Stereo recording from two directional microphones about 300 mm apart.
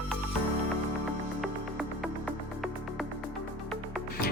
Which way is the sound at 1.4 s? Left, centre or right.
Centre.